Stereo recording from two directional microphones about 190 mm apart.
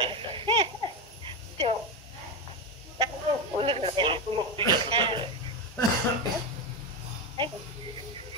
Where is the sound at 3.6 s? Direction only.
30° right (ahead or behind).